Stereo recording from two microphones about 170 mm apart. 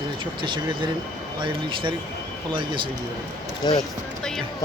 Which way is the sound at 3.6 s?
25° left (ahead or behind).